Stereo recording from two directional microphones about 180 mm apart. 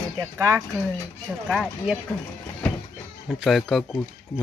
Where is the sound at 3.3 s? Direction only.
Centre (ahead or behind).